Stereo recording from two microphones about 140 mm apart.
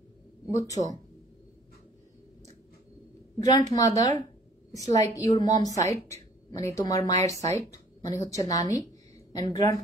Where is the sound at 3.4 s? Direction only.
25° left (ahead or behind).